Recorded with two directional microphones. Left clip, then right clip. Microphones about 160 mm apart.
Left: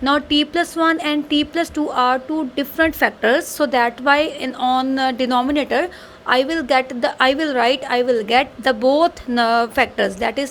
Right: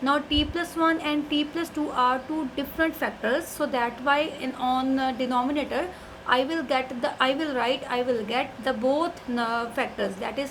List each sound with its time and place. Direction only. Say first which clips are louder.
0.0 s a woman's voice: left 7 dB; 55° left (ahead or behind)